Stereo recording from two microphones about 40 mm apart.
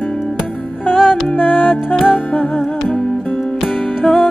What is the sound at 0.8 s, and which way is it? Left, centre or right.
Music, centre.